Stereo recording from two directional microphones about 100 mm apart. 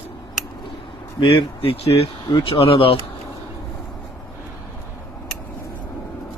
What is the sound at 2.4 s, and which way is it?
Speech, 65° left (ahead or behind).